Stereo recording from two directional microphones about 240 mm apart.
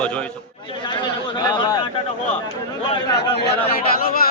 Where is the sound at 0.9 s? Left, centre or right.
Centre.